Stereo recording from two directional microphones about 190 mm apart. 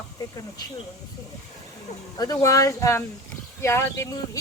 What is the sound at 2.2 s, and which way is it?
Speech, 20° left (ahead or behind).